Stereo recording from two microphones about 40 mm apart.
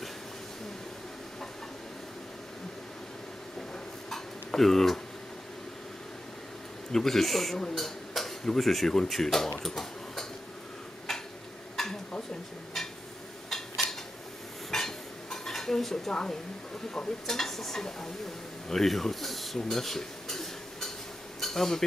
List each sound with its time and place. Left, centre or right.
4.1 s tick-tock: centre
6.9 s speech: centre
7.5 s speech: centre
7.8 s speech: centre
9.6 s a sound: centre
11.1 s tick-tock: centre
11.7 s a sound: centre
14.7 s dishes: centre
16.1 s speech: centre